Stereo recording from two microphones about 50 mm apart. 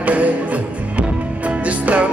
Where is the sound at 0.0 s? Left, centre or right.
Right.